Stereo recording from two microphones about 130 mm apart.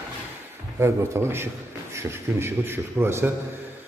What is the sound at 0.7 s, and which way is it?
A man's voice, 20° right (ahead or behind).